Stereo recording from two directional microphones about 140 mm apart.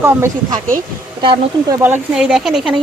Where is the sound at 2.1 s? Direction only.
5° right (ahead or behind).